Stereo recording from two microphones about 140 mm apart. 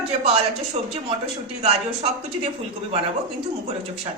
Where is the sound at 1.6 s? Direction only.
50° right (ahead or behind).